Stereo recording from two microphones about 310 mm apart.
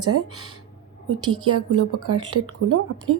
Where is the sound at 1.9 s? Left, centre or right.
Right.